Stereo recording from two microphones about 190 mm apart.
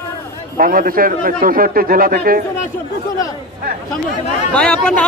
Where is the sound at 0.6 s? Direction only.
50° right (ahead or behind).